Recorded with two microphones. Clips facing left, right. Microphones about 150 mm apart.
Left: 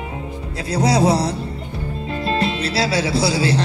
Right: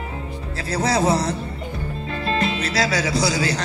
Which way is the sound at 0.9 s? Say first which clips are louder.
Left 2 dB; 35° left (ahead or behind).